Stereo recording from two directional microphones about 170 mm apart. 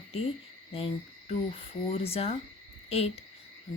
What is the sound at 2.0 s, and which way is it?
Speech, 35° left (ahead or behind).